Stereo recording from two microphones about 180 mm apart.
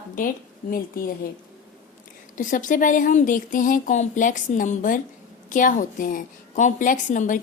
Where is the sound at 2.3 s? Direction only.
45° left (ahead or behind).